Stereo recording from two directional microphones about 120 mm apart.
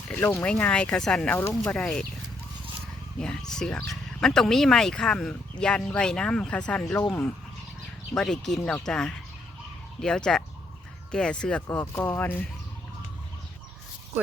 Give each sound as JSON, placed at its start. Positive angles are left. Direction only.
{"t": 0.1, "sound": "speech", "side_deg": 15}
{"t": 3.5, "sound": "speech", "side_deg": 5}
{"t": 8.1, "sound": "speech", "side_deg": 5}